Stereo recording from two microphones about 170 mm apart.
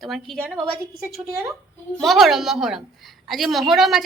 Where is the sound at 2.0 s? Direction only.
Centre (ahead or behind).